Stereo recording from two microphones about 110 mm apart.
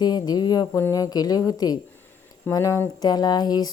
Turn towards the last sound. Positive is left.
turn(degrees=40)  # may be behind; listen again after turning